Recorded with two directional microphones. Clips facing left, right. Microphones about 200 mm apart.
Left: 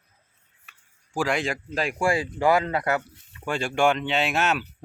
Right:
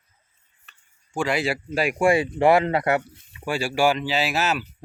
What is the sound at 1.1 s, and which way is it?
Speech, centre (ahead or behind).